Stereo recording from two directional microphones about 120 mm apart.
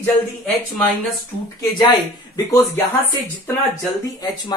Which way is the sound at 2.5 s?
25° left (ahead or behind).